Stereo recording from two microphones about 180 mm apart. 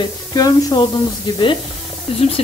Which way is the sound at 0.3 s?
20° left (ahead or behind).